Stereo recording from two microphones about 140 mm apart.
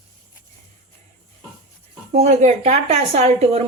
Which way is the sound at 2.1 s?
55° right (ahead or behind).